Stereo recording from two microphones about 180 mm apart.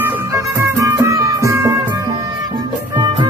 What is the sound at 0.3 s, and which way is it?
Music, 15° right (ahead or behind).